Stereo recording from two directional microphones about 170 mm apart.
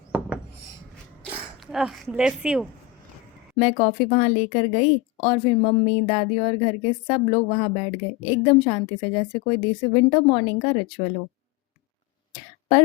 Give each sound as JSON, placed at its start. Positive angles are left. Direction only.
{"t": 1.3, "sound": "speech", "side_deg": 0}
{"t": 3.6, "sound": "speech", "side_deg": 35}
{"t": 12.3, "sound": "a sound", "side_deg": 35}